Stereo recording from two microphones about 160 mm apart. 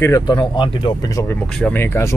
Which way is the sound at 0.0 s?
25° left (ahead or behind).